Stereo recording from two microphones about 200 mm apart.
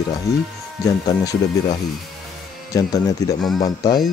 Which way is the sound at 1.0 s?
20° left (ahead or behind).